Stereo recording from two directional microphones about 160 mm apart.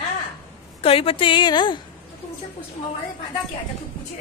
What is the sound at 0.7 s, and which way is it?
A woman's voice, 35° left (ahead or behind).